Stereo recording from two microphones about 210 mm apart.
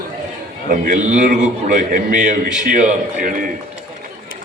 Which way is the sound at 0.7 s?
35° right (ahead or behind).